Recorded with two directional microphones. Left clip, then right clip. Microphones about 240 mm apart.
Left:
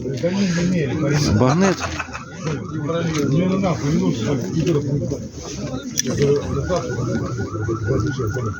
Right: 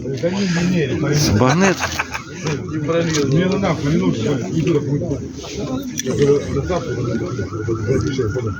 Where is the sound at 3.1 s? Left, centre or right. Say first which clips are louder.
Right 3 dB; right.